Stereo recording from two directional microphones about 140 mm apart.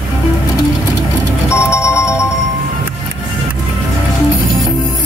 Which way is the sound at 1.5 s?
20° left (ahead or behind).